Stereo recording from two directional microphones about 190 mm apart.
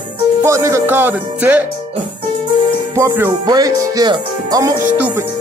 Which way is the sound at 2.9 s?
15° right (ahead or behind).